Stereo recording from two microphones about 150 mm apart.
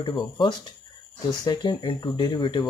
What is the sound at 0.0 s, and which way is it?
Speech, 30° left (ahead or behind).